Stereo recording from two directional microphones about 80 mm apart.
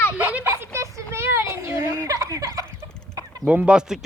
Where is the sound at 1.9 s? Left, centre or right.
Right.